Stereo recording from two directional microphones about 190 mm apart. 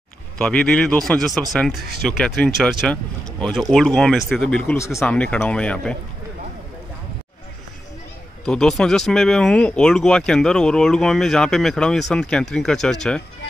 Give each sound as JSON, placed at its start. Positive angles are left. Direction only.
{"t": 0.4, "sound": "speech", "side_deg": 5}
{"t": 1.8, "sound": "speech", "side_deg": -55}
{"t": 2.0, "sound": "speech", "side_deg": 5}
{"t": 8.5, "sound": "speech", "side_deg": 5}